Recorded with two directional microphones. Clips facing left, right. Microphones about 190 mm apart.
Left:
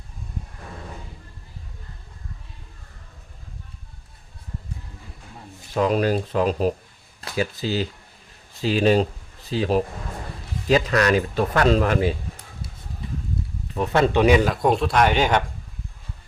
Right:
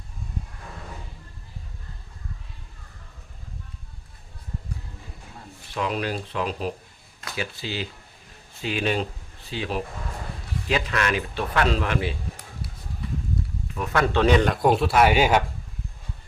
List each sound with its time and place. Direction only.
5.7 s speech: 40° left (ahead or behind)
13.7 s speech: 30° left (ahead or behind)
14.1 s a man's voice: 10° left (ahead or behind); by 15.4 s 5° right (ahead or behind)